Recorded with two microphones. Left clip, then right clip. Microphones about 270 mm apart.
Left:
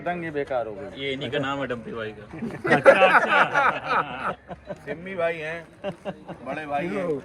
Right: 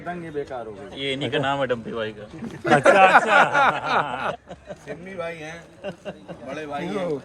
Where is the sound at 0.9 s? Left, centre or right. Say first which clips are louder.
Right 3 dB; right.